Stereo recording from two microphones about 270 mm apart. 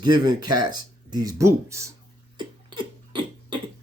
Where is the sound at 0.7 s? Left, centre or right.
Centre.